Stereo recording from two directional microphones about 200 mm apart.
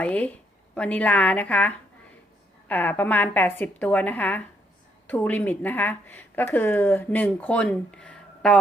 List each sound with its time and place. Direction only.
0.0 s a woman's voice: 5° left (ahead or behind)